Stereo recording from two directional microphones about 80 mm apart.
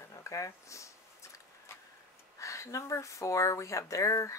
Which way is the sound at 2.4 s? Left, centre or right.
Left.